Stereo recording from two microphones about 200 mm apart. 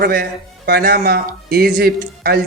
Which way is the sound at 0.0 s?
50° right (ahead or behind).